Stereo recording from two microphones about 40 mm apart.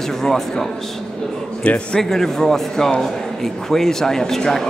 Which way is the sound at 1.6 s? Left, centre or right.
Left.